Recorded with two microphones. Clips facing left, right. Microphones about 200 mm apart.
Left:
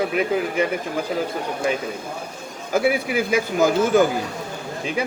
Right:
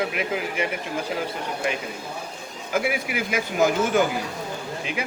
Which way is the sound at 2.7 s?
30° left (ahead or behind).